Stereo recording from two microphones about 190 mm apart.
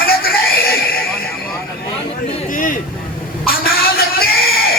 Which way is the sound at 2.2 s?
45° left (ahead or behind).